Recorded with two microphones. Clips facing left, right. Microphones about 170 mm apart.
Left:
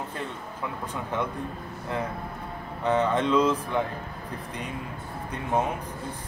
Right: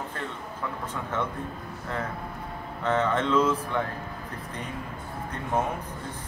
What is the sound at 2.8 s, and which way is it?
Speech, 15° left (ahead or behind).